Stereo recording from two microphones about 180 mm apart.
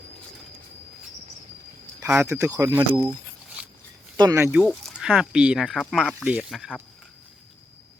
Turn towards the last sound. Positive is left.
turn(degrees=0)  # may be behind; listen again after turning